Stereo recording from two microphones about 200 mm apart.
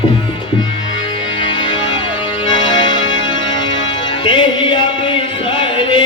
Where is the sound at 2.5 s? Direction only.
25° left (ahead or behind).